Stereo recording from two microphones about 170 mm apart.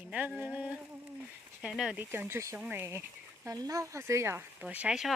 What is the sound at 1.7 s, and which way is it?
Speech, 5° right (ahead or behind).